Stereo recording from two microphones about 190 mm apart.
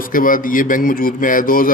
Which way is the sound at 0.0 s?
45° left (ahead or behind).